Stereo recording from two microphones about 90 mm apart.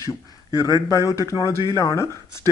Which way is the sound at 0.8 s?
35° left (ahead or behind).